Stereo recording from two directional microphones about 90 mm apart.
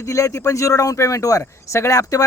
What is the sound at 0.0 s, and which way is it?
Speech, 35° left (ahead or behind).